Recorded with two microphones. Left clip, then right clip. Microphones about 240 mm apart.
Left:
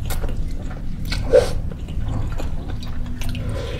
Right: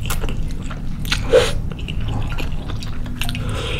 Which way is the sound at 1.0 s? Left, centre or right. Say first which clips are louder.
Right 1 dB; right.